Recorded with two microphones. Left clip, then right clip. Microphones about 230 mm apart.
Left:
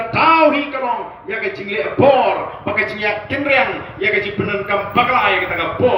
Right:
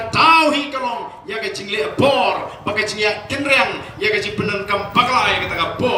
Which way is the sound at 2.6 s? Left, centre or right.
Right.